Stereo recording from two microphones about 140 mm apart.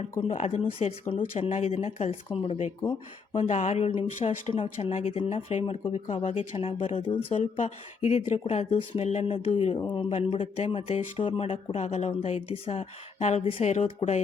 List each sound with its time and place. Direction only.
0.2 s speech: 45° left (ahead or behind)
3.3 s speech: 50° left (ahead or behind)